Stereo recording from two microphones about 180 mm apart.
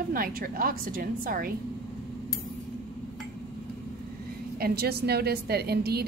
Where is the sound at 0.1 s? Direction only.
50° right (ahead or behind).